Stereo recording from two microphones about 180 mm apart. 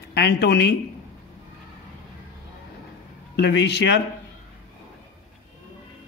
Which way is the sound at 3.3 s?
70° left (ahead or behind).